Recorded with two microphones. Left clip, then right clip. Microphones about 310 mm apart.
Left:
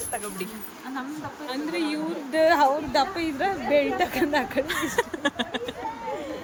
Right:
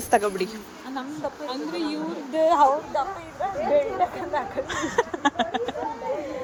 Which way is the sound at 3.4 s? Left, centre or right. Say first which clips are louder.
Right 1 dB; left.